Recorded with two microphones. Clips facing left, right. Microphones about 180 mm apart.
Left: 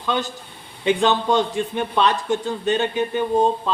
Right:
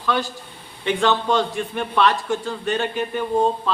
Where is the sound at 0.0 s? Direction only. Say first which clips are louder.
Right 1 dB; 20° left (ahead or behind).